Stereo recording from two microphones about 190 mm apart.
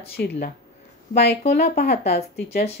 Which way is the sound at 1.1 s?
55° left (ahead or behind).